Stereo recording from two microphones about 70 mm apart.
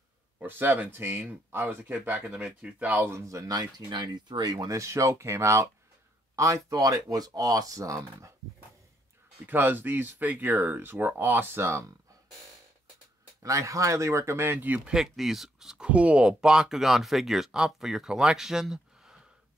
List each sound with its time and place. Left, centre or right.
0.5 s speech: right
2.3 s speech: centre
3.1 s speech: right
9.5 s speech: right
13.4 s speech: right
14.9 s speech: centre